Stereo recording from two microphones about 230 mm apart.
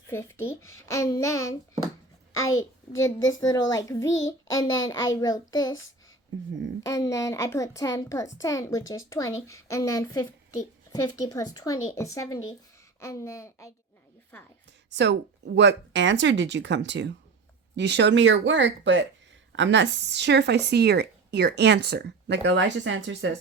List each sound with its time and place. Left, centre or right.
0.1 s a child's voice: centre
2.9 s a child's voice: centre
6.8 s a child's voice: centre
14.9 s speech: right